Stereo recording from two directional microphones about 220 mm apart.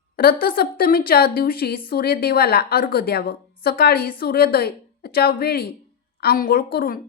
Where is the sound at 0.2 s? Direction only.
40° left (ahead or behind).